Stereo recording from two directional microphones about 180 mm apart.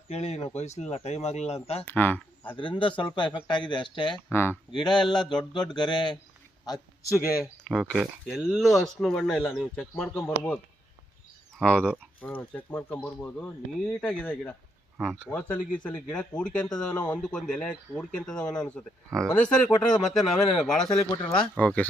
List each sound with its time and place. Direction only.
0.1 s speech: 35° left (ahead or behind)
1.8 s speech: 10° left (ahead or behind)
2.6 s speech: 30° left (ahead or behind)
4.3 s speech: 15° left (ahead or behind)
4.7 s speech: 25° left (ahead or behind)
7.6 s speech: 5° left (ahead or behind)
11.6 s speech: 5° left (ahead or behind)